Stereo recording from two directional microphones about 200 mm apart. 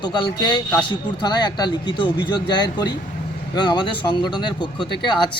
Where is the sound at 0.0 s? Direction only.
20° left (ahead or behind).